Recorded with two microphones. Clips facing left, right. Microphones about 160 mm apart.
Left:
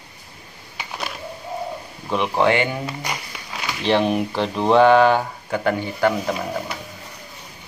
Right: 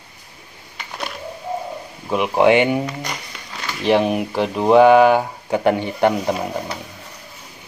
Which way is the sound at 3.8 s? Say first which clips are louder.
Right 2 dB; 10° right (ahead or behind).